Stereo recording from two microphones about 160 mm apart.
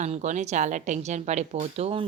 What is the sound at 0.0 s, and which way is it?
Speech, 45° right (ahead or behind).